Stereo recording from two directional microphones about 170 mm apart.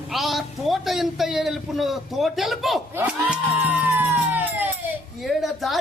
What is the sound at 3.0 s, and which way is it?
Music, 10° right (ahead or behind).